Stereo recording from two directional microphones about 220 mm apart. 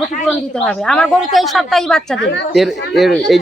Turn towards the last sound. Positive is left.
turn(degrees=0)  # may be behind; listen again after turning